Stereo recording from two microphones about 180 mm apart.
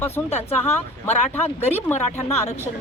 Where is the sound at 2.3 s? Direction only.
35° left (ahead or behind).